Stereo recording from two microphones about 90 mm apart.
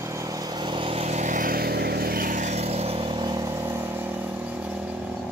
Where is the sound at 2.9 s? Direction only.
80° right; by 4.9 s 15° right (ahead or behind).